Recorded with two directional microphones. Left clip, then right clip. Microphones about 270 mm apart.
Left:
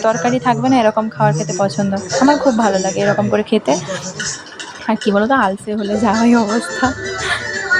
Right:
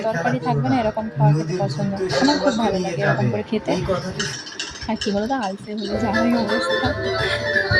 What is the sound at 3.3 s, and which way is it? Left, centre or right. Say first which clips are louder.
Speech: left 8 dB; centre.